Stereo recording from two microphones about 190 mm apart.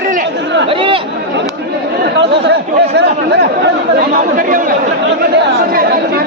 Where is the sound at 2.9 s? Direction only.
60° right (ahead or behind).